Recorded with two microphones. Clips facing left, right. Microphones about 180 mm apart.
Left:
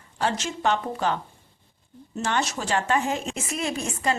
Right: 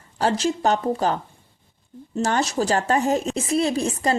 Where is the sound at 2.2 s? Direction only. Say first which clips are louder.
Right 5 dB; 40° right (ahead or behind).